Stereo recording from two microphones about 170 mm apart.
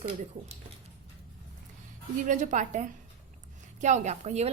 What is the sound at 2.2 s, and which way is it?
A woman's voice, 45° right (ahead or behind).